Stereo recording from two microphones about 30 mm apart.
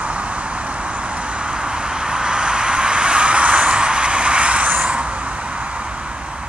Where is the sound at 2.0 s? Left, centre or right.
Right.